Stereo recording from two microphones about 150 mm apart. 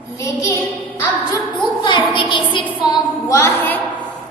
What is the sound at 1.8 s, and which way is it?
A woman's voice, 30° left (ahead or behind).